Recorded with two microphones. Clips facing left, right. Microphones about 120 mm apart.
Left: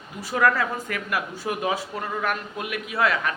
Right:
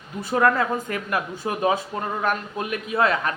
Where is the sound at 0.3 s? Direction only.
25° right (ahead or behind).